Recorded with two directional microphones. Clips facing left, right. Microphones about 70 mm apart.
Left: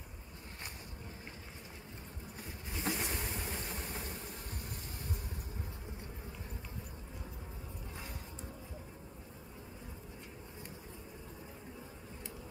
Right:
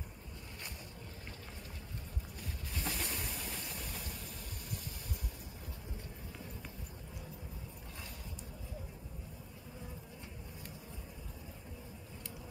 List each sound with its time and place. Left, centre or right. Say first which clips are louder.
2.8 s vehicle: left 4 dB; left